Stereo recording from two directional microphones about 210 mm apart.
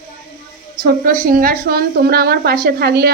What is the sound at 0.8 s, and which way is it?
A woman's voice, 40° right (ahead or behind).